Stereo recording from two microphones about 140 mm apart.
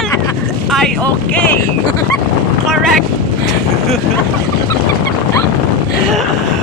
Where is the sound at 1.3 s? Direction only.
10° left (ahead or behind).